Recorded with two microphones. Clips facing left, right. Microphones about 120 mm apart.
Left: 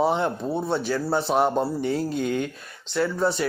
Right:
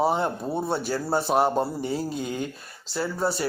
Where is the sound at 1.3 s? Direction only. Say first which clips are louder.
Even; 5° right (ahead or behind).